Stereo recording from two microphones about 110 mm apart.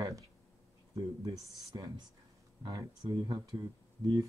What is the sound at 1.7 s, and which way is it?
Speech, 40° right (ahead or behind).